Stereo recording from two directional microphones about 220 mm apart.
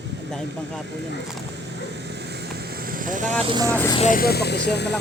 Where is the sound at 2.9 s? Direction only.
40° right (ahead or behind).